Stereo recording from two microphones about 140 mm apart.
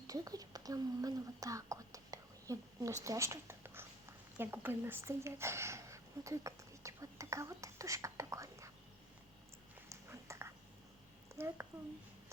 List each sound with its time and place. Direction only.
0.1 s a woman's voice: 25° right (ahead or behind)
9.9 s a sound: 20° right (ahead or behind)
11.3 s a woman's voice: 20° right (ahead or behind)